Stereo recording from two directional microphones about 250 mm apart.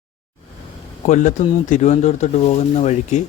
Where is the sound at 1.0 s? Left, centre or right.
Left.